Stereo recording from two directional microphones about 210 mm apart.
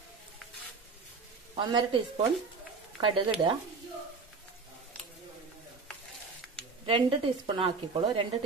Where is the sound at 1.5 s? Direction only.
25° right (ahead or behind).